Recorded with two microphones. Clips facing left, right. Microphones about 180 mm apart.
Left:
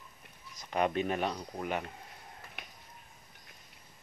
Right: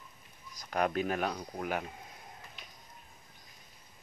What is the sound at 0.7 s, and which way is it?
Speech, centre (ahead or behind).